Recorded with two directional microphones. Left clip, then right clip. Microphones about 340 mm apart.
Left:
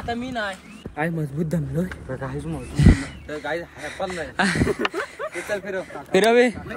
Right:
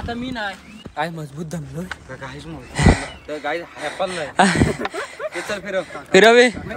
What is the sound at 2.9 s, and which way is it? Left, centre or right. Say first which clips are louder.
Speech: right 4 dB; centre.